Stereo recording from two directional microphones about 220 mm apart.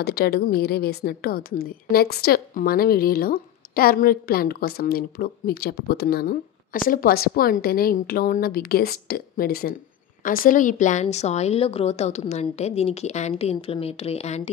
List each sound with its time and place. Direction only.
0.0 s a woman's voice: 45° left (ahead or behind); by 14.5 s 30° left (ahead or behind)